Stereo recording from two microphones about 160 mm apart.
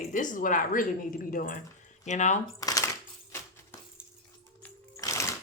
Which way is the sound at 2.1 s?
50° left (ahead or behind).